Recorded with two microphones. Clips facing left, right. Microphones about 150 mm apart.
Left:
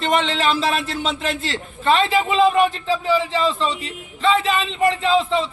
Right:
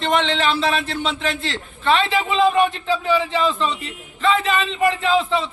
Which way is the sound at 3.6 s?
30° left (ahead or behind).